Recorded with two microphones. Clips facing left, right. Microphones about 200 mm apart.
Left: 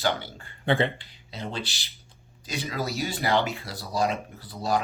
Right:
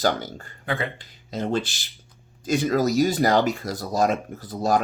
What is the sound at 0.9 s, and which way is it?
Speech, 45° right (ahead or behind).